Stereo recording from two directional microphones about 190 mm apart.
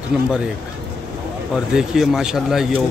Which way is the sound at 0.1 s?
5° right (ahead or behind).